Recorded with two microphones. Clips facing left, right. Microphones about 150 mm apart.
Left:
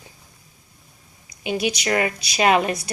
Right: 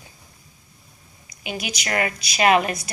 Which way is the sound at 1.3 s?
30° left (ahead or behind).